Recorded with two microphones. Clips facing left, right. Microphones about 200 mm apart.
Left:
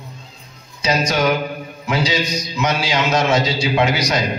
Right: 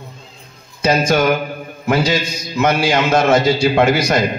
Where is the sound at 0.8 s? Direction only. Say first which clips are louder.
Right 4 dB; 50° right (ahead or behind).